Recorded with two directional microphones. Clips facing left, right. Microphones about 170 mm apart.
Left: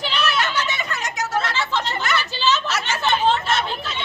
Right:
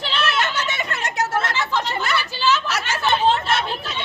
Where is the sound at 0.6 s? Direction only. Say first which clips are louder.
Even; 50° right (ahead or behind).